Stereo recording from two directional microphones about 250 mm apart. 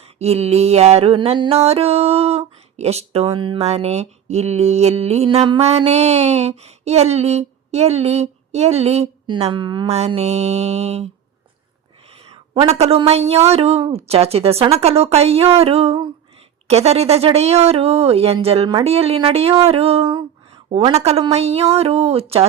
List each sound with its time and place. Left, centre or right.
0.0 s mantra: right
2.7 s speech: right
12.1 s speech: right